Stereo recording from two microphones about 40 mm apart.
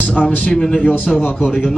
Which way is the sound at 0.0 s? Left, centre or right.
Left.